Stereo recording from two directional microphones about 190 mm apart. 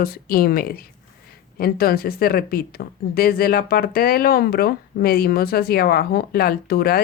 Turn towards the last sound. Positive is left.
turn(degrees=55)  # may be behind; listen again after turning